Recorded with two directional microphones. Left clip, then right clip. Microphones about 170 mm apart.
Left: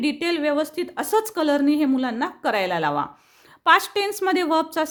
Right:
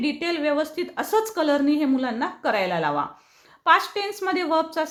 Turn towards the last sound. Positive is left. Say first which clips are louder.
# left 2 dB
turn(degrees=45)  # may be behind; listen again after turning